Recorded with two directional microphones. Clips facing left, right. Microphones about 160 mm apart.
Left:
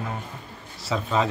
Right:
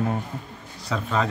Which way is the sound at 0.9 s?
5° left (ahead or behind).